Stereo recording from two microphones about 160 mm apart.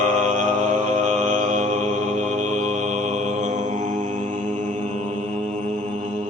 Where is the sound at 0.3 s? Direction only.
50° right (ahead or behind).